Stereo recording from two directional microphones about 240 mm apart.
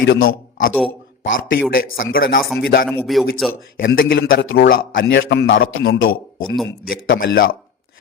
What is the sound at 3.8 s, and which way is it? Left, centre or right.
A man's voice, left.